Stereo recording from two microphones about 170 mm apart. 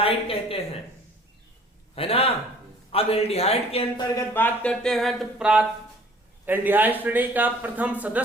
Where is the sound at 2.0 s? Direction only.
35° left (ahead or behind).